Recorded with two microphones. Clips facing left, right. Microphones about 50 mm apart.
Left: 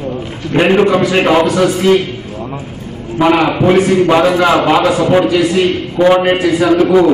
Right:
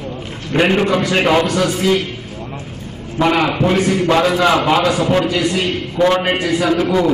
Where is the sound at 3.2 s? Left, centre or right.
Centre.